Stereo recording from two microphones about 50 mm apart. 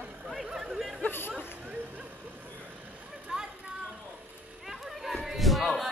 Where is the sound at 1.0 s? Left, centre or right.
Left.